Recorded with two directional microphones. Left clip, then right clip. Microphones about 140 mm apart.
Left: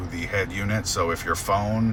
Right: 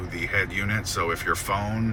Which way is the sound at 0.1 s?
35° left (ahead or behind).